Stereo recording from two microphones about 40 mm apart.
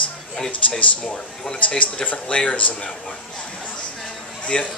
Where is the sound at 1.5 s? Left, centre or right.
Left.